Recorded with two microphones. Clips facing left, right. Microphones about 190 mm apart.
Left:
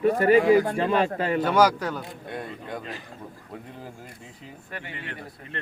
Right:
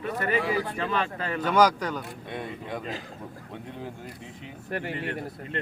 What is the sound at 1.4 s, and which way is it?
Speech, 10° left (ahead or behind).